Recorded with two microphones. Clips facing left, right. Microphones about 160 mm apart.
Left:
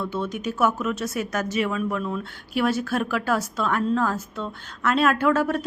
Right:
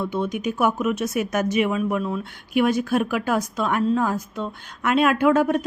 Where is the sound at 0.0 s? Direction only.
15° right (ahead or behind).